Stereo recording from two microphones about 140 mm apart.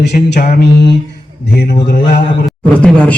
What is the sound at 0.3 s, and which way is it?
Mantra, 60° left (ahead or behind).